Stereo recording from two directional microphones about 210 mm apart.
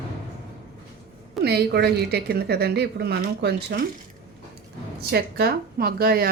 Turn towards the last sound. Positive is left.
turn(degrees=-45)  # may be behind; listen again after turning